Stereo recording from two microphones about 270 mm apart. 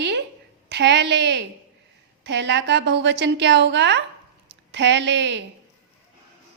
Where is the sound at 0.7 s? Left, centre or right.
Right.